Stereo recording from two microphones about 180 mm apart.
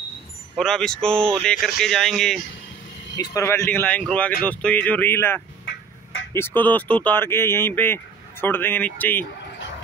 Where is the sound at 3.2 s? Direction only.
15° left (ahead or behind).